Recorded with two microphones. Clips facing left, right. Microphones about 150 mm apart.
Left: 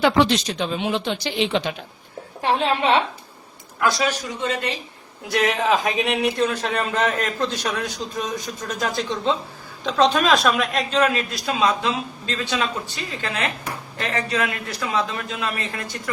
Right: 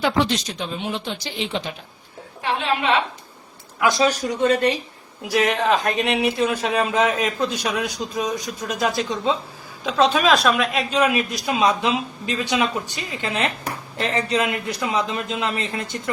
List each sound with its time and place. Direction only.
0.0 s speech: 90° left
2.4 s a woman's voice: 35° left (ahead or behind)
4.0 s a man's voice: 40° right (ahead or behind)
5.3 s a woman's voice: centre (ahead or behind); by 16.0 s 20° right (ahead or behind)